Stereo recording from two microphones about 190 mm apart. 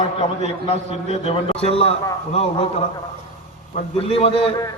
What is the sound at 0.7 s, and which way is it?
A man's voice, 30° left (ahead or behind).